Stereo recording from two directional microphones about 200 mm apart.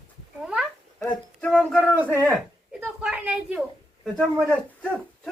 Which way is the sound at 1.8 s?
5° left (ahead or behind).